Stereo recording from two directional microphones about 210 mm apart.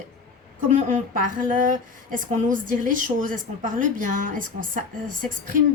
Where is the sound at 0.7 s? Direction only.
35° right (ahead or behind).